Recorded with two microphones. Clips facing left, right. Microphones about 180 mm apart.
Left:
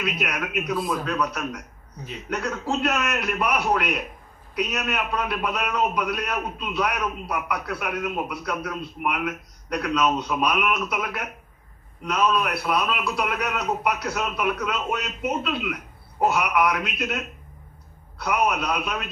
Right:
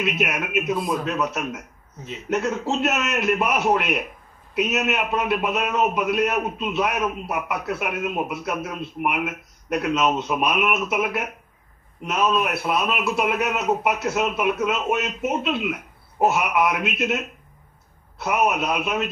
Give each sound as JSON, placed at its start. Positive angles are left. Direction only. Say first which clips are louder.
{"t": 0.0, "sound": "a man's voice", "louder": "right 3 dB", "side_deg": -25}